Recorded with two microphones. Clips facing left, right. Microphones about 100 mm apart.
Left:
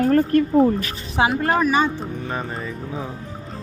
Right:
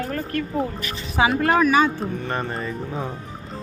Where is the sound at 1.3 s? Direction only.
Centre (ahead or behind).